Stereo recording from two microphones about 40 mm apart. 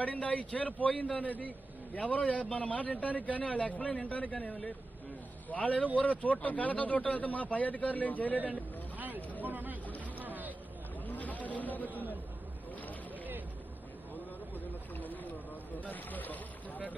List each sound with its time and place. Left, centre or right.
0.0 s a man's voice: left
8.5 s vehicle: right
9.4 s hubbub: right
10.1 s vehicle: right
11.1 s a sound: left
11.9 s chatter: right
14.5 s a sound: left
15.7 s boat: left